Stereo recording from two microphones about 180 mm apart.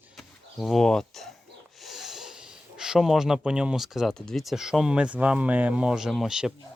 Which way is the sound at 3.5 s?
5° right (ahead or behind).